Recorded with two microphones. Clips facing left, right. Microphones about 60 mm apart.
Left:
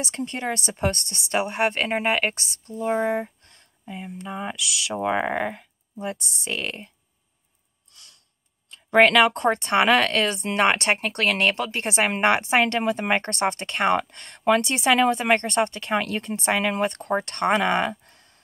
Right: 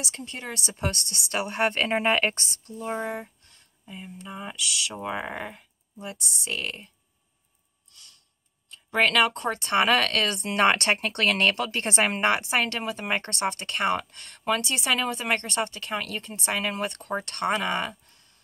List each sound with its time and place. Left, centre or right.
0.2 s speech: left
0.7 s speech: left
1.8 s speech: centre
2.7 s speech: left
3.4 s speech: left
8.9 s speech: left
9.7 s speech: left
12.8 s speech: left